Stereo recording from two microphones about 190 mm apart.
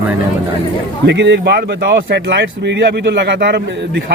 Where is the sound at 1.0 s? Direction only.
65° right (ahead or behind).